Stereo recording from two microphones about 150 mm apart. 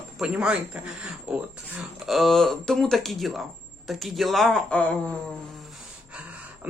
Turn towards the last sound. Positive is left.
turn(degrees=-10)  # may be behind; listen again after turning